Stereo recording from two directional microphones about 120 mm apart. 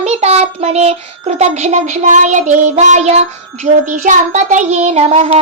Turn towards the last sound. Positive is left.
turn(degrees=-60)  # may be behind; listen again after turning